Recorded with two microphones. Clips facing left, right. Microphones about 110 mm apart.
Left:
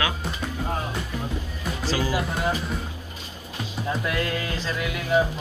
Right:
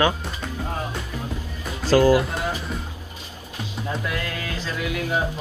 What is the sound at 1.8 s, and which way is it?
Speech, 50° right (ahead or behind).